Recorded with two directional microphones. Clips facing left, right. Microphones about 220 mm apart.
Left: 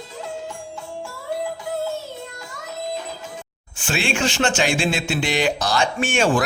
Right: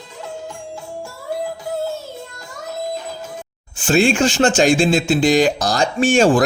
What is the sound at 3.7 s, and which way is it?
Speech, 40° right (ahead or behind).